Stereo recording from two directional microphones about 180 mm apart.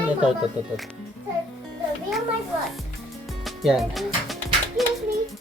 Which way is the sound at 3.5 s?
Centre (ahead or behind).